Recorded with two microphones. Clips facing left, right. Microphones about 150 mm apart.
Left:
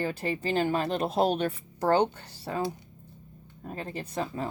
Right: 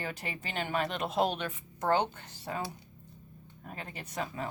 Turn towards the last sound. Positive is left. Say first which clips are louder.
# left 5 dB
turn(degrees=35)  # may be behind; listen again after turning